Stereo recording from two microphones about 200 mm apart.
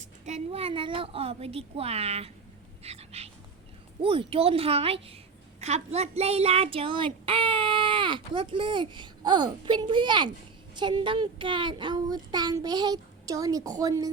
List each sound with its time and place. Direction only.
0.0 s a woman's voice: 35° right (ahead or behind)
2.8 s a sound: 30° right (ahead or behind)
4.0 s a woman's voice: 25° right (ahead or behind)